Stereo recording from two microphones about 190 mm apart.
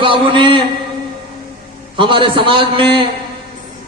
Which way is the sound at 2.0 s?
25° right (ahead or behind).